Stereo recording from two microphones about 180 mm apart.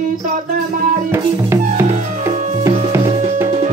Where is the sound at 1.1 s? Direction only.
15° right (ahead or behind).